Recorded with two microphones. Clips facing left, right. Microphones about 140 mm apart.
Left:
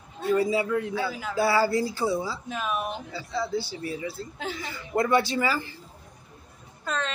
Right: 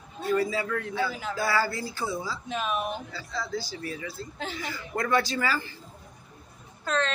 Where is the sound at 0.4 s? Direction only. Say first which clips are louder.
Left 4 dB; 20° left (ahead or behind).